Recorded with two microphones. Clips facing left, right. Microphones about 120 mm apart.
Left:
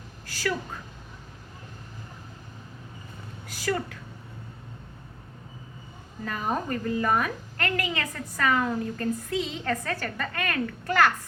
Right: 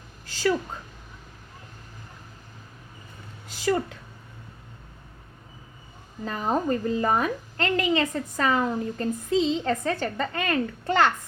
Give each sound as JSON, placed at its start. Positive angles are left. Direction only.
{"t": 0.3, "sound": "a sound", "side_deg": -20}
{"t": 3.5, "sound": "speech", "side_deg": -20}
{"t": 6.2, "sound": "a woman's voice", "side_deg": -25}